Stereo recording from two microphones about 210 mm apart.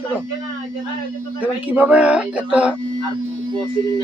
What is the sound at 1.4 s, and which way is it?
Speech, 5° right (ahead or behind).